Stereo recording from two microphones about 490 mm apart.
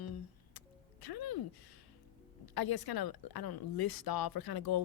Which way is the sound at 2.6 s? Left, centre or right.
Left.